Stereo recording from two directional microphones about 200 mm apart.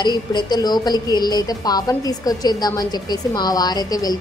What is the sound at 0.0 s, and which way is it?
A woman's voice, 20° left (ahead or behind).